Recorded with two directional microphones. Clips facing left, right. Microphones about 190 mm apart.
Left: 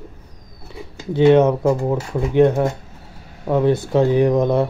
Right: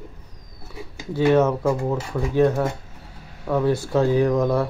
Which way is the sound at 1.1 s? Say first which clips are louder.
Left 5 dB; 20° left (ahead or behind).